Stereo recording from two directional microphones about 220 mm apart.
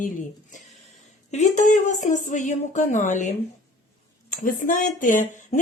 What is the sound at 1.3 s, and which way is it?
Speech, 35° left (ahead or behind).